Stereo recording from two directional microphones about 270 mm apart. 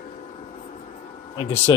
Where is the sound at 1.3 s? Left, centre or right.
Centre.